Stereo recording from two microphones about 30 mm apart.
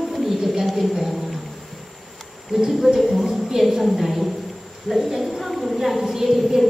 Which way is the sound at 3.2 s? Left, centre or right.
Centre.